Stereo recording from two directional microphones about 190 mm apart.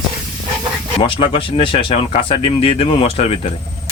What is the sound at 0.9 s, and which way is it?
Speech, 25° left (ahead or behind).